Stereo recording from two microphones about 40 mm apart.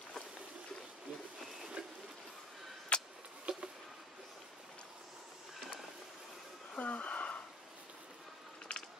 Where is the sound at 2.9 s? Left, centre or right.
Left.